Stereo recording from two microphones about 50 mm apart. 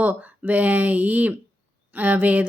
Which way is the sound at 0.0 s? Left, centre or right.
Right.